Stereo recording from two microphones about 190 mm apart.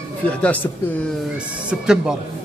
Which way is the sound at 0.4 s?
10° left (ahead or behind).